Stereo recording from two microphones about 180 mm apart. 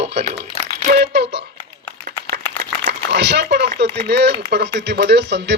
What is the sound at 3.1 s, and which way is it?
Speech, 65° right (ahead or behind).